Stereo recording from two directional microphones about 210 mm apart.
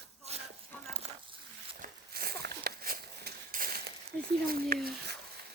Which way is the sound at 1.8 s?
45° right (ahead or behind).